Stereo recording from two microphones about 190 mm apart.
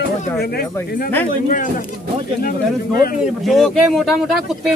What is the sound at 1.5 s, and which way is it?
Speech, 45° left (ahead or behind).